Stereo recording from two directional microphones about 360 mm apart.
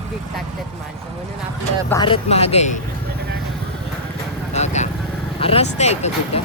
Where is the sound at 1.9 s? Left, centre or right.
Centre.